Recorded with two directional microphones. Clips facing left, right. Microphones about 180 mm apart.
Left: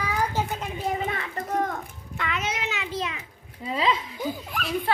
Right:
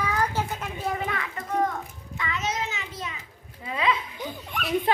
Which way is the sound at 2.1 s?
65° left (ahead or behind).